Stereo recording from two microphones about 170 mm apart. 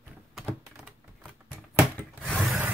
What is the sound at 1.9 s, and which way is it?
Wood, 5° left (ahead or behind).